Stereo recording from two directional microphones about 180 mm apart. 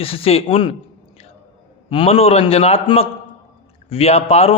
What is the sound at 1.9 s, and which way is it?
A man's voice, 30° left (ahead or behind).